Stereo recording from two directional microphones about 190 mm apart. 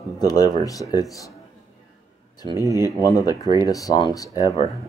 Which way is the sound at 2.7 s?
20° left (ahead or behind).